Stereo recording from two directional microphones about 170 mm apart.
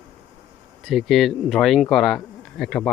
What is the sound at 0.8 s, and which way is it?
Speech, centre (ahead or behind).